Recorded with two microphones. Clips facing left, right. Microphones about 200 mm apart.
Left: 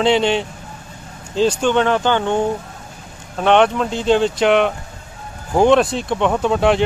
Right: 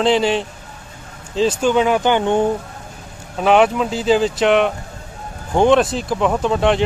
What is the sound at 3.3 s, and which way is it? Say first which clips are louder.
Speech: even; 5° right (ahead or behind).